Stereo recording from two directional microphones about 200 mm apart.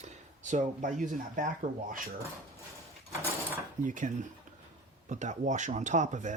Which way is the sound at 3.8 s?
40° right (ahead or behind).